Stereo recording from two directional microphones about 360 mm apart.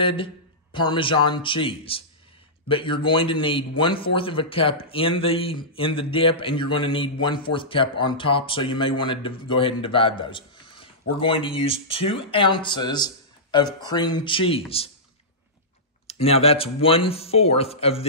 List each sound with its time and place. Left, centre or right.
0.0 s a man's voice: centre
16.1 s a man's voice: centre